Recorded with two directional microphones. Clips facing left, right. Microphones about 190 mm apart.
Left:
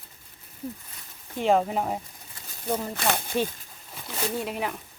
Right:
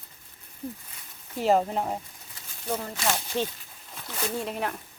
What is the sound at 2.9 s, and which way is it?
Speech, 55° left (ahead or behind).